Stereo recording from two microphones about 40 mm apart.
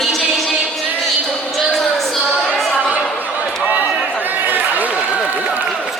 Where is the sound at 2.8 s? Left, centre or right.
Right.